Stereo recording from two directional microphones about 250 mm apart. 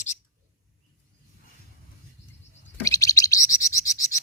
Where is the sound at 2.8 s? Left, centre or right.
Centre.